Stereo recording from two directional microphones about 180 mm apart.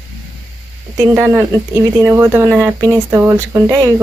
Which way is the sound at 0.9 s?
15° right (ahead or behind).